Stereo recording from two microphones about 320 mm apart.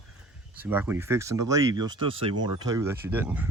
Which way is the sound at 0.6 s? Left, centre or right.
Centre.